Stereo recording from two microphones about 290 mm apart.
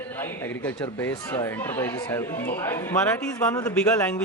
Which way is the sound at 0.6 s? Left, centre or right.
Centre.